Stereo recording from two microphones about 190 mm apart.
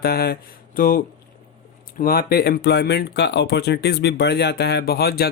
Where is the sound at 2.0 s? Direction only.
50° left (ahead or behind).